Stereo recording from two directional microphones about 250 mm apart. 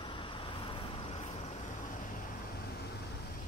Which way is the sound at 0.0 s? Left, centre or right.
Centre.